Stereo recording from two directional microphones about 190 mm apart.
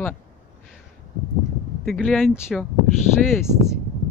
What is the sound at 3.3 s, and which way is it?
Speech, 15° left (ahead or behind).